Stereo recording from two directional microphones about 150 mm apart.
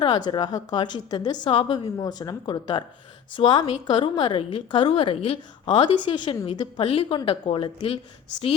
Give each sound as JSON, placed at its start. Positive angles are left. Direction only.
{"t": 0.3, "sound": "a woman's voice", "side_deg": 30}